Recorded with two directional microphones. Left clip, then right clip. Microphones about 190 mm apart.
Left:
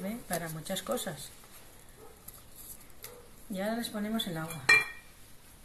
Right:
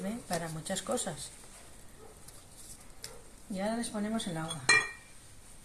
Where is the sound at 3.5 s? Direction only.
Centre (ahead or behind).